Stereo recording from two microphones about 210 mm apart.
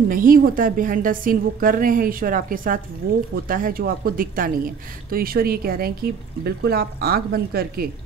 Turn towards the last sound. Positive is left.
turn(degrees=-45)  # may be behind; listen again after turning